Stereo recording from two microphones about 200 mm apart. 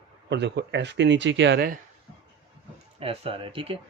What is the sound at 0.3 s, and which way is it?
Speech, 60° right (ahead or behind).